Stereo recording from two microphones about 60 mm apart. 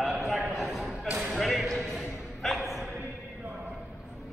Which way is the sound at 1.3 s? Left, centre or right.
Centre.